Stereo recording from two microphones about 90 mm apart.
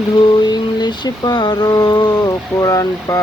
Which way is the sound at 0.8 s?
50° left (ahead or behind).